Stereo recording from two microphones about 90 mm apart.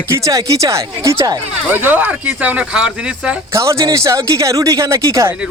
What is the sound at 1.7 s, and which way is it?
Speech, 20° right (ahead or behind).